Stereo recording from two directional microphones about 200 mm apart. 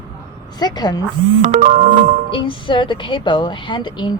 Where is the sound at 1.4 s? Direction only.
40° right (ahead or behind).